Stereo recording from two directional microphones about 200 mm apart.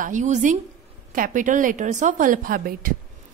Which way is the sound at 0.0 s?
40° right (ahead or behind).